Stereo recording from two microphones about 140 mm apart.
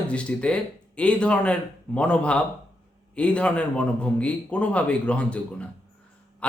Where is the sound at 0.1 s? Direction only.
10° left (ahead or behind).